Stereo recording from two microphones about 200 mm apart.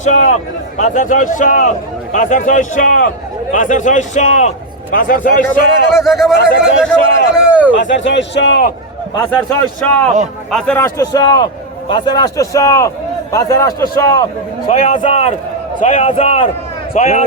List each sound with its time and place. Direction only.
0.0 s a man's voice: 35° left (ahead or behind)
5.9 s speech: centre (ahead or behind)
7.3 s a sound: 5° right (ahead or behind)
7.8 s a man's voice: 65° left (ahead or behind)
9.1 s a man's voice: 10° left (ahead or behind)
14.7 s a man's voice: 35° left (ahead or behind)